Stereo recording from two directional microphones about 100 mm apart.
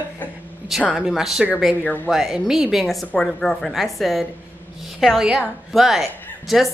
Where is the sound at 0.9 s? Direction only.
5° right (ahead or behind).